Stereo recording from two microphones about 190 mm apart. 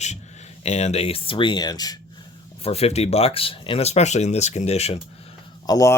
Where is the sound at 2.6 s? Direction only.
30° left (ahead or behind).